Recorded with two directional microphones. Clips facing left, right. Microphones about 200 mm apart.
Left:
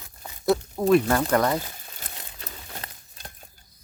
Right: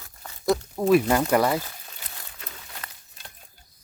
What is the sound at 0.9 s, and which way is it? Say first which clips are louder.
Speech: even; 10° right (ahead or behind).